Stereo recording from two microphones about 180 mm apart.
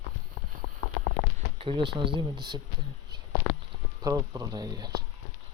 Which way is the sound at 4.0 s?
20° right (ahead or behind).